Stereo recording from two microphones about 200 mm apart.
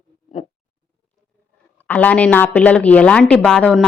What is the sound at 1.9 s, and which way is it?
A woman's voice, 5° left (ahead or behind).